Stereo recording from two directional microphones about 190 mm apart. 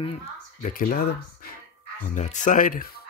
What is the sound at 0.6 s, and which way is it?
Speech, 45° left (ahead or behind).